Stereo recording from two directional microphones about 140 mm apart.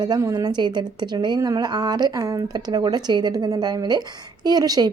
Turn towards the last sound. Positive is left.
turn(degrees=-30)  # may be behind; listen again after turning